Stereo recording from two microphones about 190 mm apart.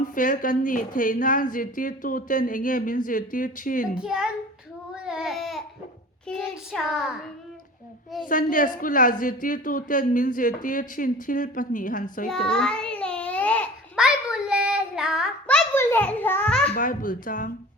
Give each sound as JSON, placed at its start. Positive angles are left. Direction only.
{"t": 0.0, "sound": "a woman's voice", "side_deg": 45}
{"t": 3.9, "sound": "a child's voice", "side_deg": -5}
{"t": 5.0, "sound": "baby cry", "side_deg": -5}
{"t": 6.2, "sound": "a child's voice", "side_deg": 0}
{"t": 8.3, "sound": "a woman's voice", "side_deg": 45}
{"t": 12.3, "sound": "child singing", "side_deg": 5}
{"t": 13.9, "sound": "child singing", "side_deg": -5}
{"t": 15.4, "sound": "a sound", "side_deg": 10}
{"t": 16.7, "sound": "a woman's voice", "side_deg": 45}